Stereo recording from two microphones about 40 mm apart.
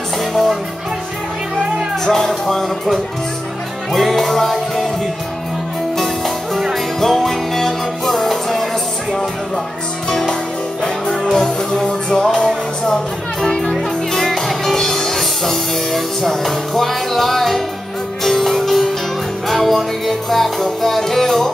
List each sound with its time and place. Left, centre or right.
0.2 s music: centre
2.0 s speech: centre
3.9 s music: centre
5.9 s music: centre
10.0 s music: centre
13.7 s music: centre
14.2 s music: centre